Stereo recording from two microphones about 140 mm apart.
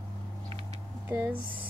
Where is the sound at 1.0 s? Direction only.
15° right (ahead or behind).